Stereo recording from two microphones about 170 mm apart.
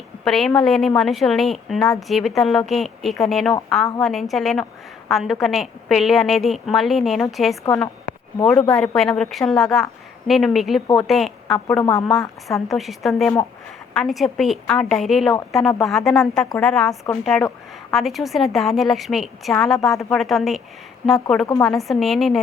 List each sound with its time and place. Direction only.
0.3 s a woman's voice: centre (ahead or behind)
9.0 s a woman's voice: 5° left (ahead or behind)
11.8 s speech: 20° left (ahead or behind)
12.0 s a woman's voice: centre (ahead or behind)